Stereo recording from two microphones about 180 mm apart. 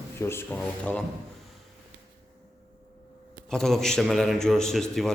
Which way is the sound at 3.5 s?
Centre (ahead or behind).